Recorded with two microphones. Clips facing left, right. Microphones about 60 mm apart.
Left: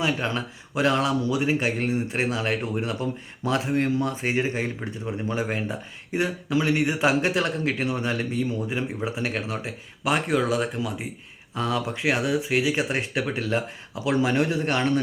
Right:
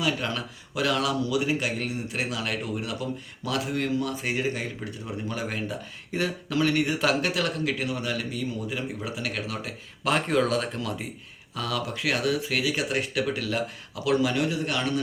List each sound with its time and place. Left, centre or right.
0.0 s speech: left
10.0 s speech: centre
11.5 s speech: left